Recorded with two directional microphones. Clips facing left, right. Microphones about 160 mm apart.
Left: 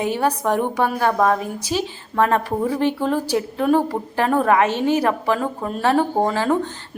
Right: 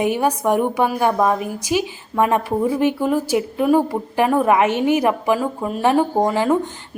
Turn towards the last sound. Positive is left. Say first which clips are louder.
# right 2 dB
turn(degrees=-15)  # may be behind; listen again after turning